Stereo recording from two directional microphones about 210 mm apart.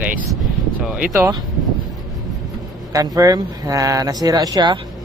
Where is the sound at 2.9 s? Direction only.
15° right (ahead or behind).